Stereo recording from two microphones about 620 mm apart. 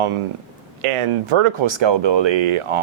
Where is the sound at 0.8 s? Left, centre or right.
Right.